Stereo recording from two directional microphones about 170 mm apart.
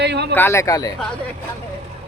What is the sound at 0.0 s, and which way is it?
Speech, 80° right.